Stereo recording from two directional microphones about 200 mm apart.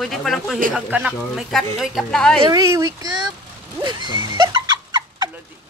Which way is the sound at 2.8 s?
20° right (ahead or behind).